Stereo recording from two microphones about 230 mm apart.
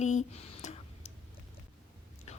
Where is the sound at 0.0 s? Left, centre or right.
Left.